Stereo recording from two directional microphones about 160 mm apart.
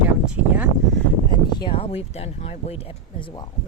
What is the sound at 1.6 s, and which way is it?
Speech, 35° left (ahead or behind).